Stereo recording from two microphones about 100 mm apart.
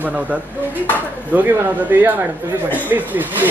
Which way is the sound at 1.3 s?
15° right (ahead or behind).